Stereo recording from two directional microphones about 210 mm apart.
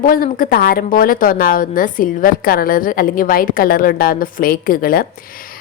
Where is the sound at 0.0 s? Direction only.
40° left (ahead or behind).